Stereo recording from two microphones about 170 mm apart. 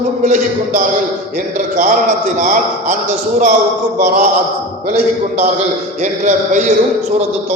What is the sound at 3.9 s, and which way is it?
A man's voice, 55° right (ahead or behind).